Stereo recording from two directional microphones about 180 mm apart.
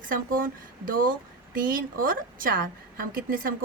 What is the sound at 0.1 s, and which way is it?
A woman's voice, 50° right (ahead or behind).